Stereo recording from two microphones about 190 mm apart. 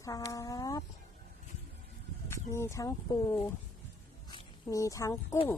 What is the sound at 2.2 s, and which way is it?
Speech, 15° left (ahead or behind).